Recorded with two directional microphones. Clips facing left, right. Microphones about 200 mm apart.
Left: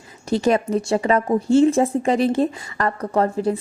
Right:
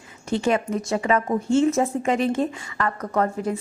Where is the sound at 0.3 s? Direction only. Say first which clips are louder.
Left 4 dB; 35° left (ahead or behind).